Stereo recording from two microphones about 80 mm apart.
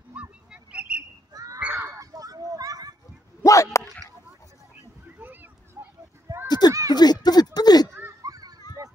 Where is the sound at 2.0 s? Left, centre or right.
Right.